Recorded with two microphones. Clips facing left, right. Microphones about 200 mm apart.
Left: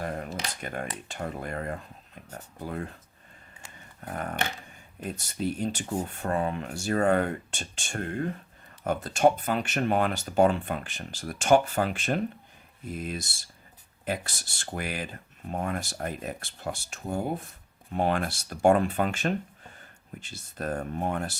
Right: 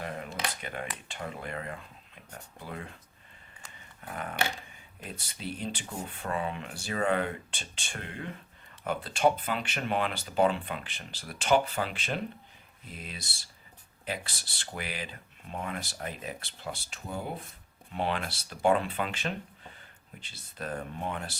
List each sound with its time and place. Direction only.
0.0 s a sound: 45° left (ahead or behind)
1.0 s speech: 45° left (ahead or behind)
4.0 s speech: 45° left (ahead or behind)